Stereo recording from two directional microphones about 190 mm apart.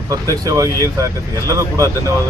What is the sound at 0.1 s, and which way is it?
Speech, 15° right (ahead or behind).